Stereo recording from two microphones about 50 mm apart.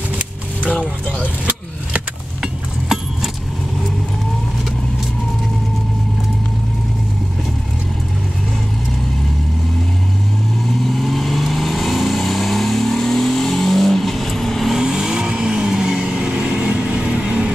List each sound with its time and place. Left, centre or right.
10.9 s vehicle: centre
14.7 s vehicle: centre